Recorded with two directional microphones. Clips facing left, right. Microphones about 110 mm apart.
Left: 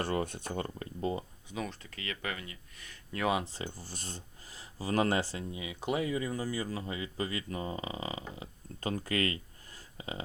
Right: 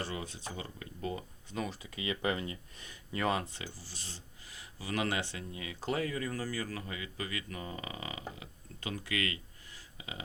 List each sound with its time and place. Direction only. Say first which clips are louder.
0.0 s speech: left 7 dB; 50° left (ahead or behind)
0.8 s speech: left 4 dB; 30° left (ahead or behind)
1.5 s speech: right 1 dB; 5° right (ahead or behind); by 3.0 s 20° right (ahead or behind)
3.1 s speech: left 1 dB; centre (ahead or behind)
3.8 s speech: left 5 dB; 50° left (ahead or behind)
4.5 s speech: left 6 dB; 35° left (ahead or behind)
5.5 s speech: left 2 dB; 15° left (ahead or behind)
8.4 s speech: left 6 dB; 40° left (ahead or behind)